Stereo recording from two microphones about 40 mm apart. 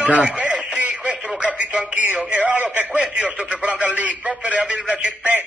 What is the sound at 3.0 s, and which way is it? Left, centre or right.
Speech, right.